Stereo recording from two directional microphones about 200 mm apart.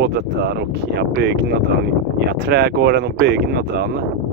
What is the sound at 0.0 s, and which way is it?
Speech, 55° right (ahead or behind).